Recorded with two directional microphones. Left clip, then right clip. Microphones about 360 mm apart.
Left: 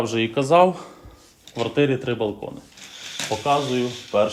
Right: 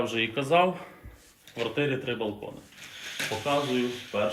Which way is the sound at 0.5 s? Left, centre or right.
Centre.